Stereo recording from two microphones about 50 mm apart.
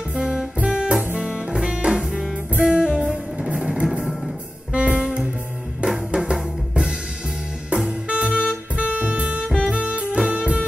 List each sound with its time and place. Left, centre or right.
0.1 s music: centre
4.0 s music: centre
4.7 s saxophone: right
5.8 s drum kit: centre
7.7 s music: centre